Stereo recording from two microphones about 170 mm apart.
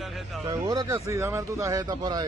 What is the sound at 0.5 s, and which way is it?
Speech, 20° right (ahead or behind).